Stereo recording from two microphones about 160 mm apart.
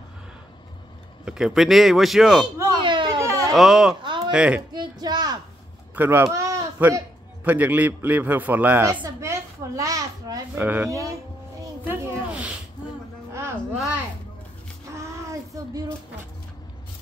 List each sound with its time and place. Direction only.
1.2 s a man's voice: 5° right (ahead or behind)
2.8 s a sound: 30° right (ahead or behind)
3.2 s baby cry: 20° right (ahead or behind)
3.5 s a man's voice: 5° right (ahead or behind)
4.7 s speech: 25° right (ahead or behind)
5.9 s a man's voice: 15° right (ahead or behind)
8.9 s a sound: 20° right (ahead or behind)
10.5 s a man's voice: 10° right (ahead or behind)
11.6 s a sound: 10° right (ahead or behind)